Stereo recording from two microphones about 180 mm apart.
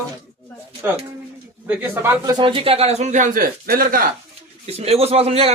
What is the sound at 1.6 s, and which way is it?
Speech, 10° right (ahead or behind).